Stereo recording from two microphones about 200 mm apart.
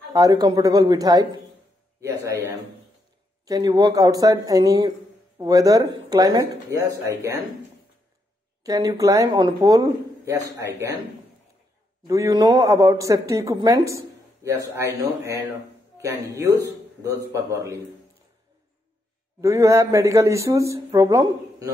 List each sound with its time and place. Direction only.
0.1 s a man's voice: 20° right (ahead or behind)
8.6 s speech: 15° right (ahead or behind)
12.1 s speech: 15° right (ahead or behind)
19.4 s speech: 15° right (ahead or behind)